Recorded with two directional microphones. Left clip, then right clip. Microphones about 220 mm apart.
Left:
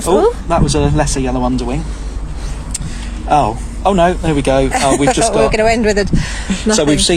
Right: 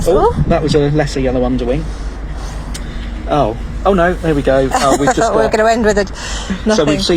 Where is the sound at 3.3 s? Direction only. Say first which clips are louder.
Left 2 dB; 45° left (ahead or behind).